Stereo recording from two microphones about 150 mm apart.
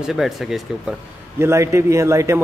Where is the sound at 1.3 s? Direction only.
20° right (ahead or behind).